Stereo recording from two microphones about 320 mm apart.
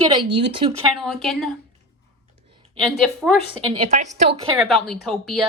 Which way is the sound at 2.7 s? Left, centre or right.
Centre.